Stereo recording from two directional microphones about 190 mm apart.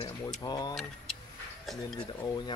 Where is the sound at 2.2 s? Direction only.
20° left (ahead or behind).